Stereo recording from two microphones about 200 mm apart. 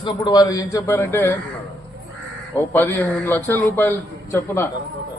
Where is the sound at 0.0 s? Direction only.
20° left (ahead or behind).